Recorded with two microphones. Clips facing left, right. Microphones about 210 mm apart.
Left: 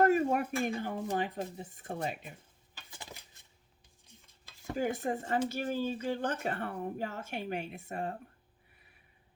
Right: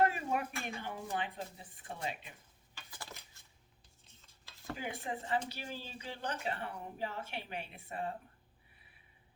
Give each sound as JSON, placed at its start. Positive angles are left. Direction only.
{"t": 0.0, "sound": "speech", "side_deg": 45}
{"t": 2.7, "sound": "dishes", "side_deg": 20}
{"t": 4.0, "sound": "stir", "side_deg": 15}
{"t": 4.8, "sound": "speech", "side_deg": 45}